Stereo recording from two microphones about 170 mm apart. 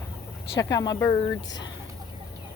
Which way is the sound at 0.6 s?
25° left (ahead or behind).